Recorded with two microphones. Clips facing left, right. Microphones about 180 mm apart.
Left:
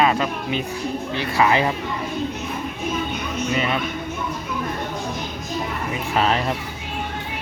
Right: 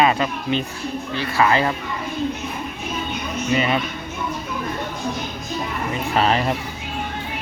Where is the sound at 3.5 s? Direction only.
Centre (ahead or behind).